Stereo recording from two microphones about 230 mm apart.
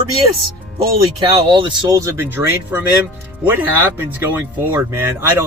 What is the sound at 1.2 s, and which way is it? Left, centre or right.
Speech, right.